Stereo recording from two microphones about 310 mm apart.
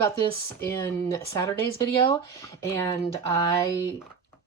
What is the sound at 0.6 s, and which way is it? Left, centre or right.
Speech, centre.